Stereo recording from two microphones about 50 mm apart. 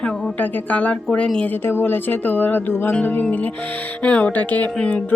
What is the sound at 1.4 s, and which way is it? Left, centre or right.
Speech, left.